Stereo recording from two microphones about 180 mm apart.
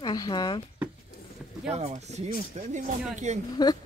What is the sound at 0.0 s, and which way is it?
Speech, 25° left (ahead or behind).